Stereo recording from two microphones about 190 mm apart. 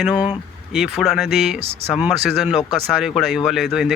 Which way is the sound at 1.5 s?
30° right (ahead or behind).